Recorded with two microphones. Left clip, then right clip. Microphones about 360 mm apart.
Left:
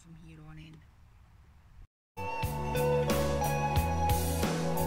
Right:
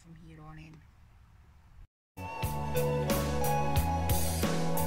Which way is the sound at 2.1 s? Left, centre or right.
Centre.